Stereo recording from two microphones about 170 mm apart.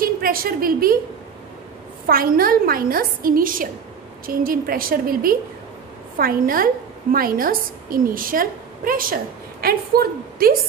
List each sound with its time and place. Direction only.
0.0 s a woman's voice: 60° right (ahead or behind)
2.0 s a woman's voice: 60° right (ahead or behind)